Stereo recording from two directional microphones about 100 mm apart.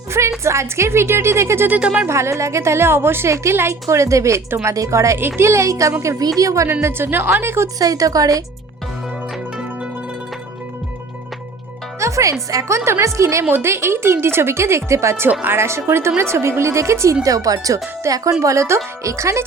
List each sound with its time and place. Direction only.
0.1 s a woman's voice: 30° right (ahead or behind); by 2.0 s 10° right (ahead or behind)
2.0 s a woman's voice: 30° right (ahead or behind)
7.8 s speech: 35° right (ahead or behind)
11.9 s a woman's voice: 30° right (ahead or behind)